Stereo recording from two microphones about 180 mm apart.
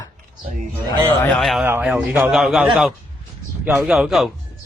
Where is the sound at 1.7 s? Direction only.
10° right (ahead or behind).